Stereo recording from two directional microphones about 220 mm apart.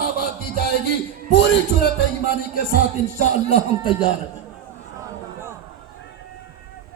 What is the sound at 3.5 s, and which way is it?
Speech, 20° left (ahead or behind).